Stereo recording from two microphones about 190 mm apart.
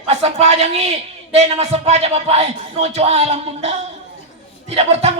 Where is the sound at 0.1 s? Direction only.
35° right (ahead or behind).